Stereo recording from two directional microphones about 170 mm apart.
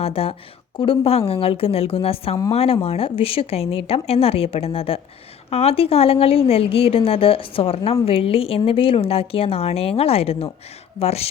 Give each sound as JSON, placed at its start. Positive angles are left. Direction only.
{"t": 0.0, "sound": "speech", "side_deg": 35}